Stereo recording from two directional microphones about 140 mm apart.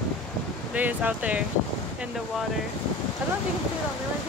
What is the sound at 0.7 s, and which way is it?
Speech, 10° right (ahead or behind).